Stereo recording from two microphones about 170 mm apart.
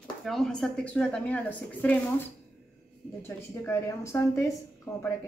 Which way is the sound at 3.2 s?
15° left (ahead or behind).